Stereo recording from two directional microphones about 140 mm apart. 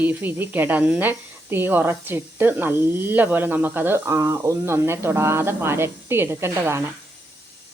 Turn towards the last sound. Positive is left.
turn(degrees=-15)  # may be behind; listen again after turning